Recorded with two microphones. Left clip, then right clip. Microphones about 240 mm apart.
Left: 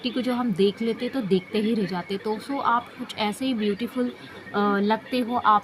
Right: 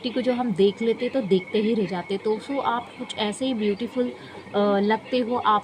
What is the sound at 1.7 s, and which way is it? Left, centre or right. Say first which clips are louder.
Speech: right 2 dB; left.